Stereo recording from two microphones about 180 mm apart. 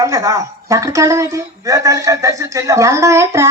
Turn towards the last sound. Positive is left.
turn(degrees=-15)  # may be behind; listen again after turning